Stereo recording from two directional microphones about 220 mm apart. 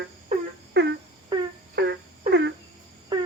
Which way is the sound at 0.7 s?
50° right (ahead or behind).